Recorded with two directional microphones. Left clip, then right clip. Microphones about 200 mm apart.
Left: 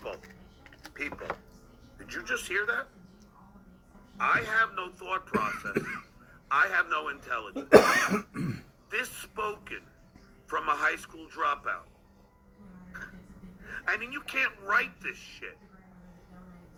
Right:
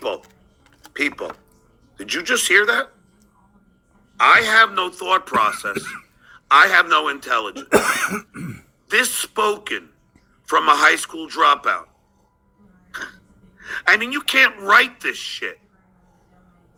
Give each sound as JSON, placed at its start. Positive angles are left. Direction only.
{"t": 0.0, "sound": "a sound", "side_deg": -55}
{"t": 1.1, "sound": "speech", "side_deg": -45}
{"t": 4.2, "sound": "speech", "side_deg": -45}
{"t": 6.8, "sound": "speech", "side_deg": -60}
{"t": 7.1, "sound": "speech", "side_deg": -45}
{"t": 13.7, "sound": "speech", "side_deg": -40}